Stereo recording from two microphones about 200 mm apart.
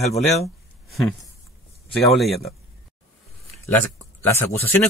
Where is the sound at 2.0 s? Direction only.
Centre (ahead or behind).